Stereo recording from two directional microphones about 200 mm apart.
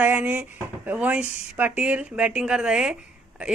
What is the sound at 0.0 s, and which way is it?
Speech, 5° right (ahead or behind).